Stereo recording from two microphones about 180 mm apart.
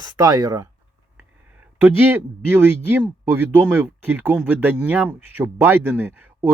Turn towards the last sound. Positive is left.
turn(degrees=-10)  # may be behind; listen again after turning